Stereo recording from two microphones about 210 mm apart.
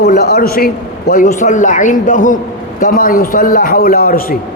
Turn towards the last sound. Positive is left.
turn(degrees=45)  # may be behind; listen again after turning